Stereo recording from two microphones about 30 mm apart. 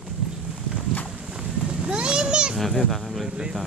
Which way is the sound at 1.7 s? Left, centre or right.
Right.